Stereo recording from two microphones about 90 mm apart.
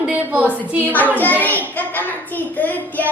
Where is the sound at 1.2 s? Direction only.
20° left (ahead or behind).